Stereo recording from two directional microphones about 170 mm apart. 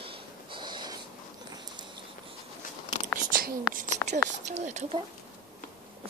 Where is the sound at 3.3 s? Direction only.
55° right (ahead or behind).